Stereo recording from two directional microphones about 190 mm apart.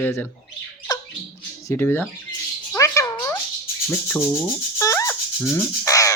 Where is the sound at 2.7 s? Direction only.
15° left (ahead or behind).